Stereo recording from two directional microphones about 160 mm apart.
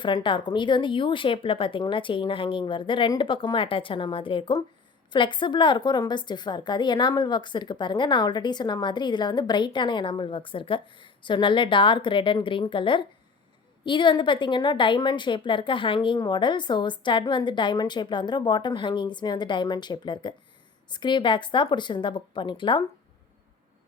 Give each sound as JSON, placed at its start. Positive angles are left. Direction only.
{"t": 0.0, "sound": "a woman's voice", "side_deg": 30}